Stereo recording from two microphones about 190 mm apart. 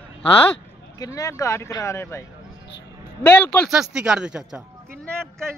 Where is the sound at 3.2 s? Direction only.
10° left (ahead or behind).